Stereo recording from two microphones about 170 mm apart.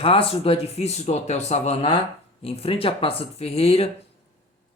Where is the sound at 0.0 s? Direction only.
35° left (ahead or behind).